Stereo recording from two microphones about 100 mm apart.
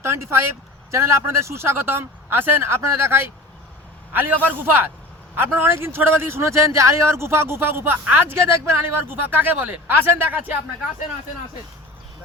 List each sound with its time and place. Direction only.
0.0 s speech: 25° right (ahead or behind)